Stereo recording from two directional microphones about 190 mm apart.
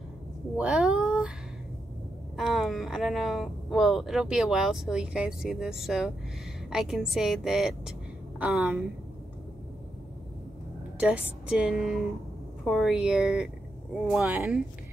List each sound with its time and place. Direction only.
0.6 s a sound: 5° right (ahead or behind)
2.3 s speech: centre (ahead or behind)
11.0 s speech: 5° right (ahead or behind)